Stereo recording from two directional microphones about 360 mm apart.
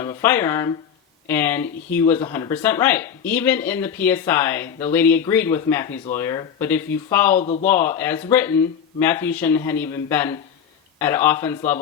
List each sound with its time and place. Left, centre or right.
0.0 s speech: centre
7.4 s speech: centre
7.7 s speech: centre